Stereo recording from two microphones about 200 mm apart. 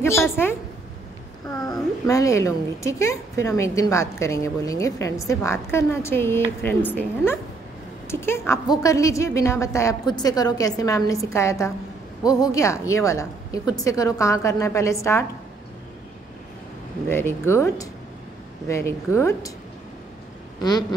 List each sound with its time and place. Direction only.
1.7 s a woman's voice: 15° left (ahead or behind)
17.1 s a woman's voice: 10° left (ahead or behind)